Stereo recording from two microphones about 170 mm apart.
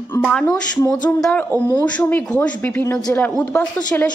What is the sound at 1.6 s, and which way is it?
Speech, 20° left (ahead or behind).